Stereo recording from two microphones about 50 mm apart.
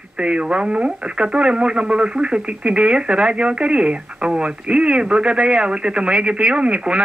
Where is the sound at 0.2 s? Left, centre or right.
Centre.